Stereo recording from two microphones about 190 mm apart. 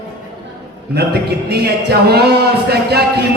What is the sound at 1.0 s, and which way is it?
A man's voice, 60° right (ahead or behind).